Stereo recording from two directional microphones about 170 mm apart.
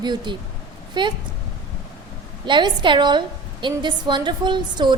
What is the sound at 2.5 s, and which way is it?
A woman's voice, 25° right (ahead or behind).